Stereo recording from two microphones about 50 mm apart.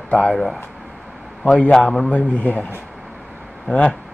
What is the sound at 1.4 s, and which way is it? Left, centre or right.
Speech, centre.